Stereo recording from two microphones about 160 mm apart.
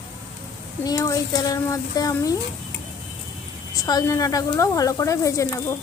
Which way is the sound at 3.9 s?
20° left (ahead or behind).